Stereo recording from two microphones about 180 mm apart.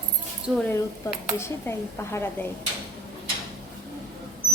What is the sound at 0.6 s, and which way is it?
Speech, 15° left (ahead or behind).